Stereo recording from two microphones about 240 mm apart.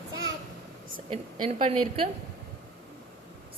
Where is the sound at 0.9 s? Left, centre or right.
Right.